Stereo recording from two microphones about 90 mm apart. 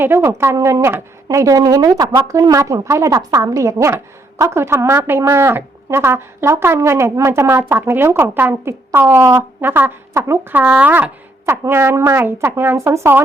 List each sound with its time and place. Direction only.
0.0 s a woman's voice: 25° right (ahead or behind)
10.5 s a woman's voice: 15° right (ahead or behind)